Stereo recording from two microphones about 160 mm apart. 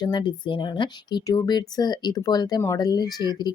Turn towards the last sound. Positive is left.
turn(degrees=25)  # may be behind; listen again after turning